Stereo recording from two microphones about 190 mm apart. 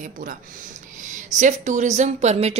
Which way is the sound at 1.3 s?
40° right (ahead or behind).